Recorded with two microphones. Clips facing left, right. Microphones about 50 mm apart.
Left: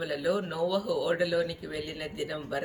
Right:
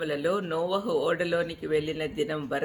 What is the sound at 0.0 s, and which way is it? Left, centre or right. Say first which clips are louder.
Speech: right 2 dB; right.